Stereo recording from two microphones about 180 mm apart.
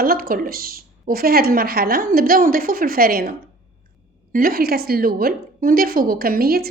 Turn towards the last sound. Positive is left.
turn(degrees=-55)  # may be behind; listen again after turning